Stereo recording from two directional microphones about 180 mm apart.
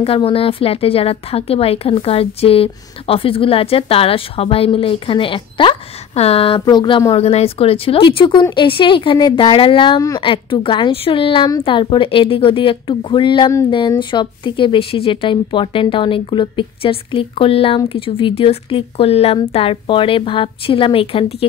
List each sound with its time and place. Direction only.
0.0 s speech: 30° left (ahead or behind)